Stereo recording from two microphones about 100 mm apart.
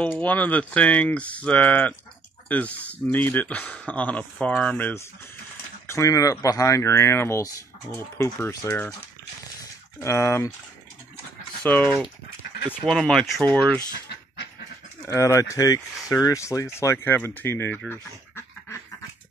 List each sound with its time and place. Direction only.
0.2 s speech: 15° left (ahead or behind)
5.9 s speech: 30° left (ahead or behind)
9.9 s speech: 30° left (ahead or behind)
11.6 s speech: 15° left (ahead or behind)
12.8 s speech: 5° left (ahead or behind)
15.0 s speech: 30° left (ahead or behind)